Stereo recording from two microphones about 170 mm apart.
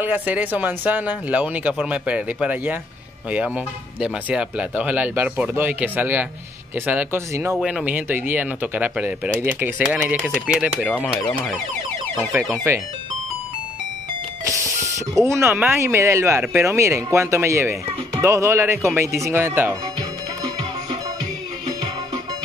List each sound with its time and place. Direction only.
0.0 s speech: 10° right (ahead or behind)
7.5 s speech: 5° right (ahead or behind)
12.7 s speech: 15° right (ahead or behind)
14.4 s vehicle: 20° right (ahead or behind)
15.2 s speech: 15° right (ahead or behind)